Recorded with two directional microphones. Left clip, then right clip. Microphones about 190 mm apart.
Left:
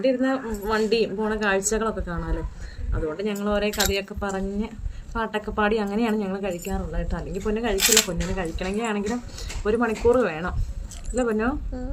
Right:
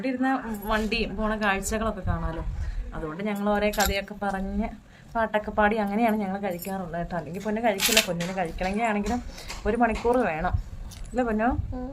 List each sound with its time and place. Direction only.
0.0 s speech: centre (ahead or behind)
11.7 s a woman's voice: 15° left (ahead or behind)